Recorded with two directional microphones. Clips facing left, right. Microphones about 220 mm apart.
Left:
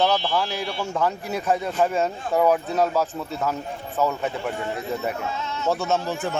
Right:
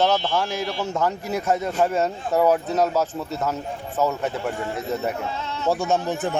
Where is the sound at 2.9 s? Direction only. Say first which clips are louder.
Right 1 dB; 5° right (ahead or behind).